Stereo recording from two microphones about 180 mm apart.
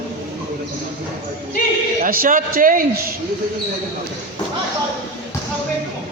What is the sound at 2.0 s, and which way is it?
Speech, 50° right (ahead or behind).